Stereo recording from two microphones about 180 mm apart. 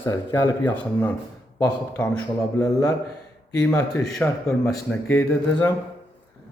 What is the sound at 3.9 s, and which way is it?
A man's voice, 5° left (ahead or behind).